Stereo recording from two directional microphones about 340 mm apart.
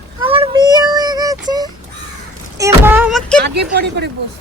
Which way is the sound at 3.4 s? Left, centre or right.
Right.